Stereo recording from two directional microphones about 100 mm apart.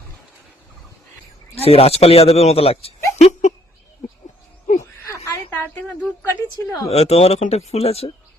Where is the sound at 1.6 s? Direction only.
85° left.